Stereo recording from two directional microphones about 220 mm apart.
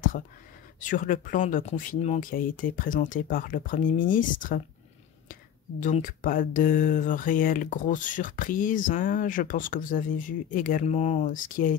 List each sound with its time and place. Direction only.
0.7 s speech: 35° left (ahead or behind)